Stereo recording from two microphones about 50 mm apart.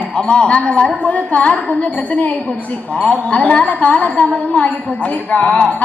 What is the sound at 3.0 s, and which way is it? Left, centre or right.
A woman's voice, left.